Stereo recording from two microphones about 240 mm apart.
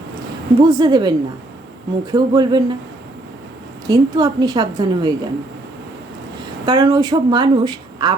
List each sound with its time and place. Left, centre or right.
0.6 s a woman's voice: centre
3.8 s a woman's voice: centre
6.7 s a woman's voice: centre